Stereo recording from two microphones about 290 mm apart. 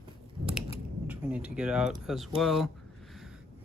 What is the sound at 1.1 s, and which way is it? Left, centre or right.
Speech, centre.